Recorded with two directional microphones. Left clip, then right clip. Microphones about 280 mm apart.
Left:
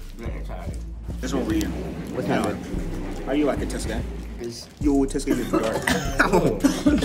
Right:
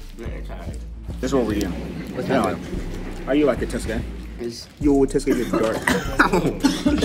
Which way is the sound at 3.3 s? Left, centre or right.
Right.